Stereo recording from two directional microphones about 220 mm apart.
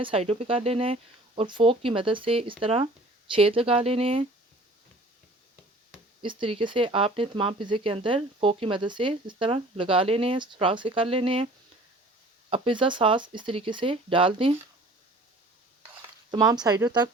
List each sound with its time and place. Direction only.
0.0 s speech: 25° right (ahead or behind)
6.2 s speech: 25° right (ahead or behind)
12.5 s speech: 25° right (ahead or behind)
16.0 s stir: 15° right (ahead or behind)
16.6 s speech: 15° right (ahead or behind)